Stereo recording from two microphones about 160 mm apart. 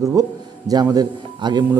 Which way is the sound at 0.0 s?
20° right (ahead or behind).